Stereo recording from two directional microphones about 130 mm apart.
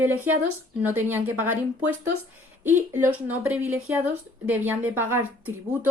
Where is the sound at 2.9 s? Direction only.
15° right (ahead or behind).